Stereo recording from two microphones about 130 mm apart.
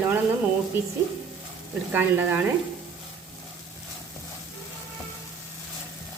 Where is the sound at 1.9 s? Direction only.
15° right (ahead or behind).